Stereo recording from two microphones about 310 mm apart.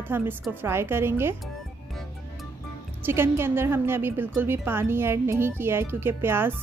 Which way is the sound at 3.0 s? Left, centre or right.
Centre.